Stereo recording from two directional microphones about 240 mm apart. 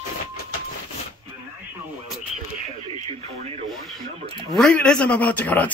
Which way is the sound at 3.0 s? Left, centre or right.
Right.